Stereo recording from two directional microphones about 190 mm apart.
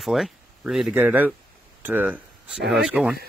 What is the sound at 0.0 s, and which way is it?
Speech, centre (ahead or behind).